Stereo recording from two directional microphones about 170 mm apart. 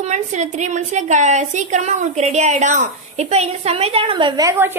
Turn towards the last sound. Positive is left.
turn(degrees=-15)  # may be behind; listen again after turning